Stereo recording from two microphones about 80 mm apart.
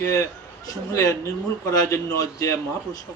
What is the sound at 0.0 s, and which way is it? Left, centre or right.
A man's voice, left.